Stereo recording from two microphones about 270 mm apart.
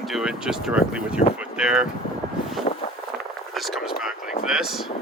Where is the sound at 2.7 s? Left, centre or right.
Left.